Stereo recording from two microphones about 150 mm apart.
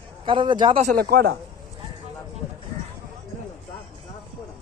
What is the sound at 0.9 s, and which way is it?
Speech, 80° right.